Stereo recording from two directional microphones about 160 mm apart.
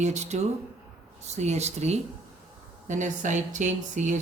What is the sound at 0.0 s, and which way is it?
Speech, 45° right (ahead or behind).